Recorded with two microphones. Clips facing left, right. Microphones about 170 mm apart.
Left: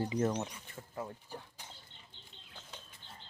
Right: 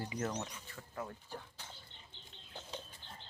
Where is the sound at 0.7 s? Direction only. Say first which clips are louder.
Left 2 dB; 25° left (ahead or behind).